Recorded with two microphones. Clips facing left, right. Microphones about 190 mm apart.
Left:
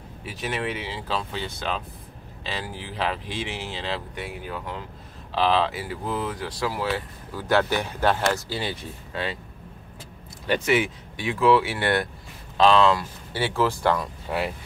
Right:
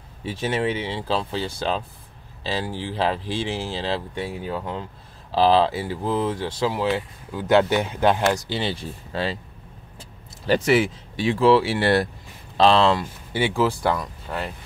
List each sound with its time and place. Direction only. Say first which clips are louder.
0.2 s speech: right 5 dB; 30° right (ahead or behind)
10.4 s speech: right 4 dB; 35° right (ahead or behind)
13.3 s speech: right 2 dB; 15° right (ahead or behind)
13.9 s speech: left 2 dB; 10° left (ahead or behind)